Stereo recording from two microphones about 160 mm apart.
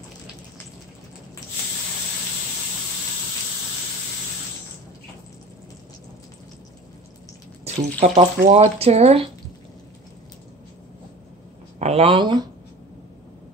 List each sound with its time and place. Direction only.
8.0 s speech: 45° right (ahead or behind)
11.8 s speech: 40° right (ahead or behind)